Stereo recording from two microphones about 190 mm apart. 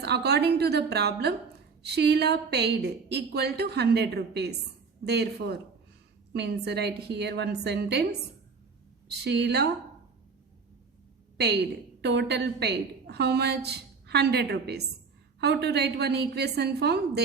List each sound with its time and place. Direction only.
0.0 s a woman's voice: 60° right (ahead or behind)
9.0 s a woman's voice: 60° right (ahead or behind)
11.3 s a woman's voice: 60° right (ahead or behind)